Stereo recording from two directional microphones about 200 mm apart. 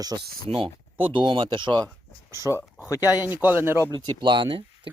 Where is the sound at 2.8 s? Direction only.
15° left (ahead or behind).